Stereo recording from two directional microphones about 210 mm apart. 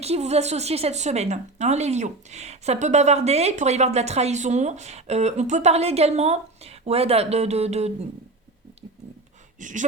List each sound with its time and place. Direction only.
0.0 s a woman's voice: 30° right (ahead or behind)
9.6 s speech: 35° right (ahead or behind)